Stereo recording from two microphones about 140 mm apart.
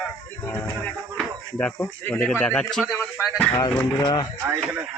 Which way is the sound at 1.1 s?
10° left (ahead or behind).